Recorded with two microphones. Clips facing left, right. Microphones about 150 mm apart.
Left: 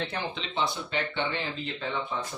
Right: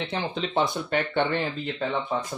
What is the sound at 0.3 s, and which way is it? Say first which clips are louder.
Speech: right 8 dB; 50° right (ahead or behind).